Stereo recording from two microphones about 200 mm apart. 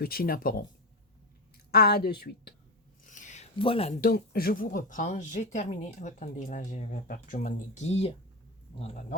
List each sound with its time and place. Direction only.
0.0 s a woman's voice: 50° left (ahead or behind)
1.7 s a woman's voice: 50° left (ahead or behind)
3.1 s a sound: 40° left (ahead or behind)
4.0 s speech: 50° left (ahead or behind)